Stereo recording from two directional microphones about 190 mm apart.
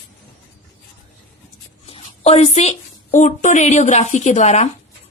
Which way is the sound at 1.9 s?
30° left (ahead or behind).